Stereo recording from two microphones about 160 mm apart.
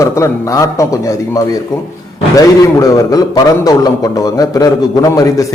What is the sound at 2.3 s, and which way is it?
A man's voice, 25° left (ahead or behind).